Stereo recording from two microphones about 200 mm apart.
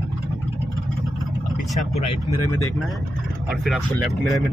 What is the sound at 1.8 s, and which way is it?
Speech, 35° left (ahead or behind).